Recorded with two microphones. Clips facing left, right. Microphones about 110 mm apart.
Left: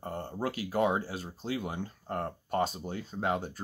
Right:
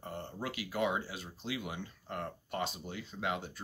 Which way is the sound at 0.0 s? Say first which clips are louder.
Left 6 dB; 40° left (ahead or behind).